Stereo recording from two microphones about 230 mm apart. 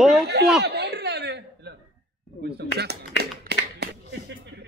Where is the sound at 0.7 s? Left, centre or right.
Right.